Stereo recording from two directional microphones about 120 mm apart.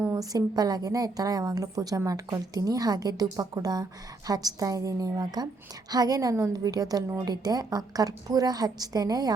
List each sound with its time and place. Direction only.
0.1 s a woman's voice: 30° right (ahead or behind)